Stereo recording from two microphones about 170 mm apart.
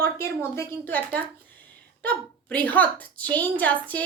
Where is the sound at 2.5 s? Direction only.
10° left (ahead or behind).